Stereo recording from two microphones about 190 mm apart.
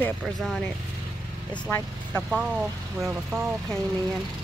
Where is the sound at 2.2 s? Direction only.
5° right (ahead or behind).